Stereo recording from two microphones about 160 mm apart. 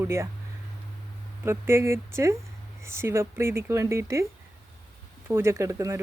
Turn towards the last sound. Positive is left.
turn(degrees=-20)  # may be behind; listen again after turning